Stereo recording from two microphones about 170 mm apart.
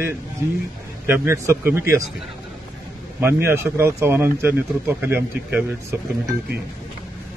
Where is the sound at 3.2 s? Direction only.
15° right (ahead or behind).